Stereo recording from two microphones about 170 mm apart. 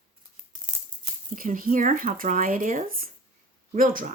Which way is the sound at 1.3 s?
55° right (ahead or behind).